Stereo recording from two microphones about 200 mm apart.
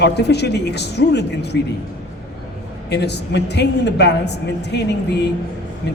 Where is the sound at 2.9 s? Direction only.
55° left (ahead or behind).